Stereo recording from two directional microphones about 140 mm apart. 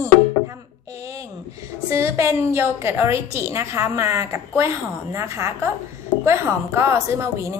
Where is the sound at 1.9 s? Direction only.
20° right (ahead or behind).